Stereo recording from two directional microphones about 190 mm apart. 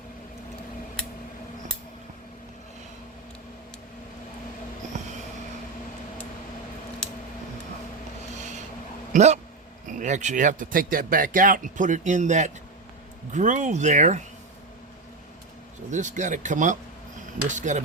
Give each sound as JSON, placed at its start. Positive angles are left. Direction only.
{"t": 9.1, "sound": "speech", "side_deg": -35}
{"t": 15.9, "sound": "speech", "side_deg": -40}